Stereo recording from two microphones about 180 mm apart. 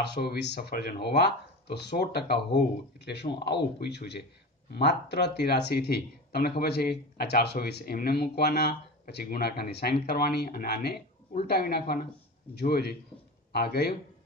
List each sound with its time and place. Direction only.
0.0 s speech: 65° left (ahead or behind)